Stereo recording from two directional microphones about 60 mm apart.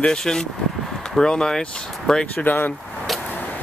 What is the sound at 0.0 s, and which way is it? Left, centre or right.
Speech, centre.